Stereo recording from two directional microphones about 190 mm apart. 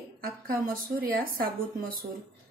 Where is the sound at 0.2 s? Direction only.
50° right (ahead or behind).